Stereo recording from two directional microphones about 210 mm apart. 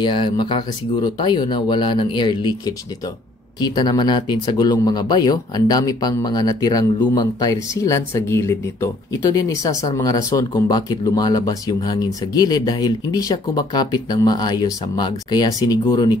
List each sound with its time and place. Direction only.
0.0 s speech: 20° left (ahead or behind)